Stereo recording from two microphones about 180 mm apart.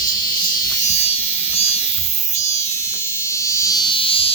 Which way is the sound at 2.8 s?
15° left (ahead or behind).